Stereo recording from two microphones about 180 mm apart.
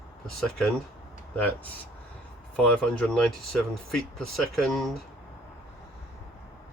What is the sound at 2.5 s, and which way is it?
Speech, 5° left (ahead or behind).